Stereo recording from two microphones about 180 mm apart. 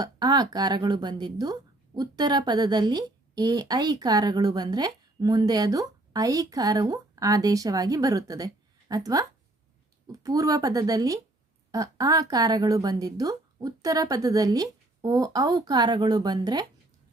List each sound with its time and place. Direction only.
0.0 s speech: 20° right (ahead or behind)